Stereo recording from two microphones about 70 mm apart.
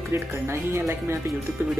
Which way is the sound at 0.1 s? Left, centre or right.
Right.